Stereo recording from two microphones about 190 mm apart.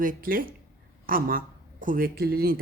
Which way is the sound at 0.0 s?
45° right (ahead or behind).